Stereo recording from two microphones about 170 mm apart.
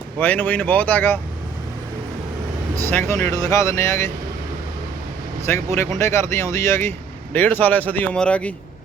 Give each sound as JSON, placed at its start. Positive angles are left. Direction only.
{"t": 0.2, "sound": "speech", "side_deg": 10}
{"t": 2.9, "sound": "speech", "side_deg": 15}
{"t": 5.5, "sound": "speech", "side_deg": 15}